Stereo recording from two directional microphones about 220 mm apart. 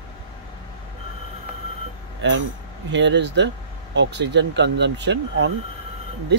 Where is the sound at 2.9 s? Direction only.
55° right (ahead or behind).